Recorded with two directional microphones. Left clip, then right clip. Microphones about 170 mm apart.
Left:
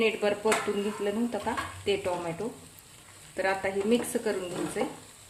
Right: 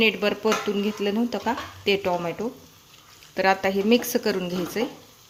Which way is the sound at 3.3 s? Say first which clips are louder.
Right 7 dB; 55° right (ahead or behind).